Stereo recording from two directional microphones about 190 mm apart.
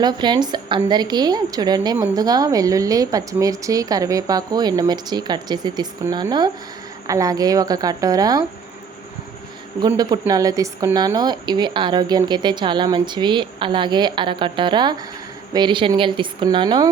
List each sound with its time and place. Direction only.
0.0 s a woman's voice: 20° right (ahead or behind)
9.8 s a woman's voice: 20° right (ahead or behind)